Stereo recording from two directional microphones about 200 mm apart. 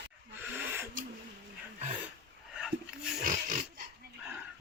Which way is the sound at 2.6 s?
5° right (ahead or behind).